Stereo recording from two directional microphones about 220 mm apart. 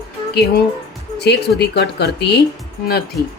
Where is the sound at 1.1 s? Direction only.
50° left (ahead or behind).